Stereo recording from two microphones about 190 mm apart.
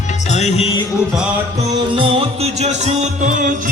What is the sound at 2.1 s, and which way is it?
Music, 35° right (ahead or behind).